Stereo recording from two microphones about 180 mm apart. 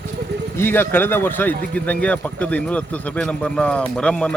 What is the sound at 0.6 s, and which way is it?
Speech, 10° left (ahead or behind).